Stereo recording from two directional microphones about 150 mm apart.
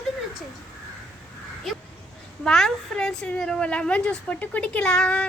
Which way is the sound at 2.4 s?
5° left (ahead or behind).